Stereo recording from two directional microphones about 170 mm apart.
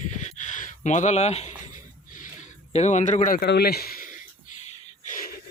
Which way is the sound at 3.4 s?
70° left (ahead or behind).